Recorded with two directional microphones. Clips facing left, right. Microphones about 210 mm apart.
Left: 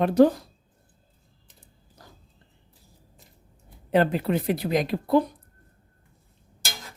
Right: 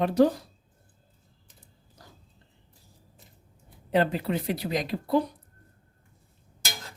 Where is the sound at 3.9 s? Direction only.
55° left (ahead or behind).